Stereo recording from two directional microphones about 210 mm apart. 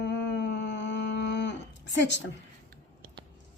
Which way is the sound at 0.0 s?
55° left (ahead or behind).